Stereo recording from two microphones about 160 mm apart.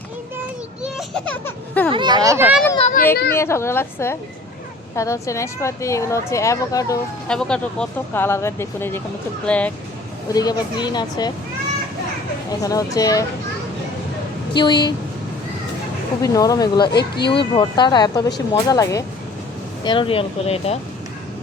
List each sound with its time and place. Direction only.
0.9 s speech: 5° left (ahead or behind)
1.9 s speech: 30° right (ahead or behind)
3.0 s a sound: 60° left (ahead or behind)
3.3 s a woman's voice: 15° left (ahead or behind)
7.3 s speech: 5° left (ahead or behind)
10.3 s a woman's voice: 25° left (ahead or behind)
12.6 s a woman's voice: 20° left (ahead or behind)
14.5 s a woman's voice: 30° left (ahead or behind)
16.2 s a woman's voice: 20° left (ahead or behind)
16.9 s speech: 90° left
17.2 s a woman's voice: 30° left (ahead or behind)